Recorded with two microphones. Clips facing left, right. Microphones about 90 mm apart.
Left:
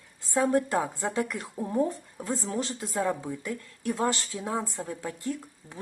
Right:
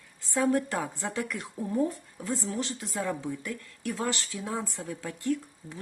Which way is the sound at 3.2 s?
10° left (ahead or behind).